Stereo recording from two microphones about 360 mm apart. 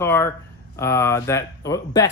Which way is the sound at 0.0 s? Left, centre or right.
Centre.